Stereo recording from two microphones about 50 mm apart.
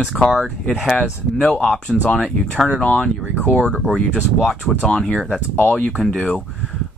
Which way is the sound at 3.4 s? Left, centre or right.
Left.